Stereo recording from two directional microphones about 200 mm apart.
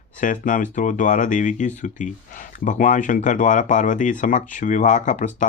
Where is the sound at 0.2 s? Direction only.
40° left (ahead or behind).